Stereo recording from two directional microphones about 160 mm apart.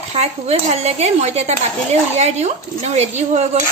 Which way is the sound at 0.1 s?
40° right (ahead or behind).